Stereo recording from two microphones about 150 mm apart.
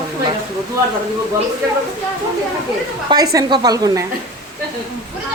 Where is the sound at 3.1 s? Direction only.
25° right (ahead or behind).